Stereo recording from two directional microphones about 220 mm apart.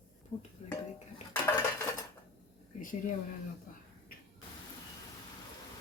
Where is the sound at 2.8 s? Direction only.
35° left (ahead or behind).